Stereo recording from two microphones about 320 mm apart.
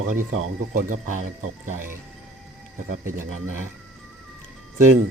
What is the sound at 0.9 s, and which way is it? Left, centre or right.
Speech, right.